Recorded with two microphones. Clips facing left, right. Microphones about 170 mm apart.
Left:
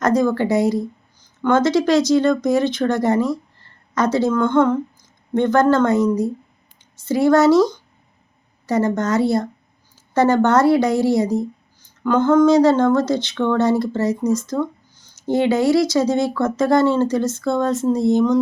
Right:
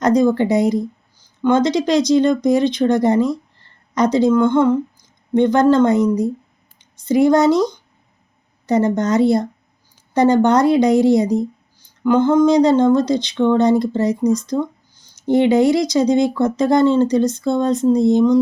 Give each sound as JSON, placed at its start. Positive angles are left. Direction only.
{"t": 0.0, "sound": "a woman's voice", "side_deg": -15}